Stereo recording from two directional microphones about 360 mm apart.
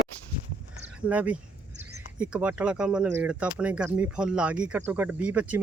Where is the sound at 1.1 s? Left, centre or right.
Centre.